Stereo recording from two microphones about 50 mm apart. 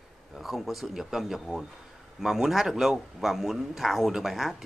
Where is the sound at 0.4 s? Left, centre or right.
Centre.